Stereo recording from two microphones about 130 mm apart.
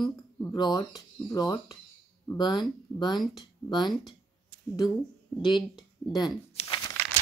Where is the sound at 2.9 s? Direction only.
35° left (ahead or behind).